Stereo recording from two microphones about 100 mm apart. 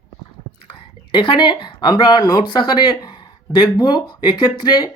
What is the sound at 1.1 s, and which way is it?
Speech, 55° left (ahead or behind).